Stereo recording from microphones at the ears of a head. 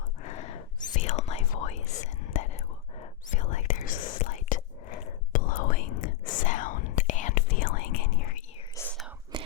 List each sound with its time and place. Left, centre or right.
0.2 s whispering: left